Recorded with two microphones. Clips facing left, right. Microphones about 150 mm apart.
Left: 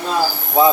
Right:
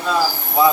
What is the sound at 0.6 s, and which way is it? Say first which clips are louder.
Speech: left 2 dB; 25° left (ahead or behind).